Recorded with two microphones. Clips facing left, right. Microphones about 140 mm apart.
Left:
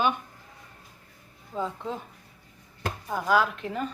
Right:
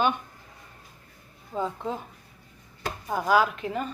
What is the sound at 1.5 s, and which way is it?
Speech, 25° right (ahead or behind).